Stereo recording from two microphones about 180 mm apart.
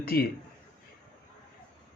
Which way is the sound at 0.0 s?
55° left (ahead or behind).